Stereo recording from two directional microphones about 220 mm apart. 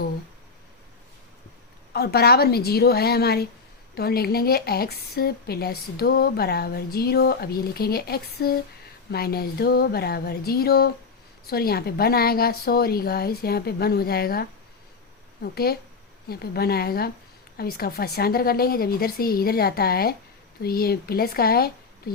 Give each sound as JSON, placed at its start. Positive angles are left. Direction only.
{"t": 1.9, "sound": "a woman's voice", "side_deg": 45}
{"t": 15.5, "sound": "a woman's voice", "side_deg": 45}